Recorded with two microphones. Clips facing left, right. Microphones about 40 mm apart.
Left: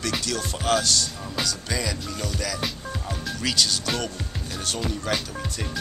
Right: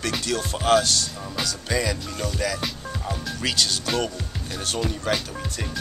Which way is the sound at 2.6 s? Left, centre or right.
Centre.